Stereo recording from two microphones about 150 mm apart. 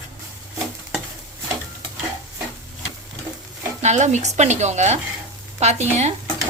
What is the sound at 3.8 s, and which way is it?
Speech, 50° right (ahead or behind).